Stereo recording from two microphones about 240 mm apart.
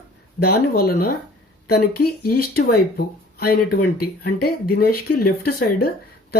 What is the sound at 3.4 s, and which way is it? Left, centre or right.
Speech, left.